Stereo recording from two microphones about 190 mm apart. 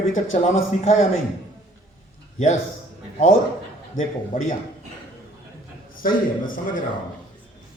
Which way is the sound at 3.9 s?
40° left (ahead or behind).